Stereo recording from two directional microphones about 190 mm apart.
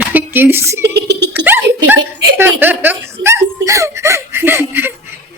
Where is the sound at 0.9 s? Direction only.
65° right (ahead or behind).